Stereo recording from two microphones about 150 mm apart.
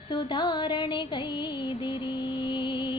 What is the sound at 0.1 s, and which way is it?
Music, 30° left (ahead or behind).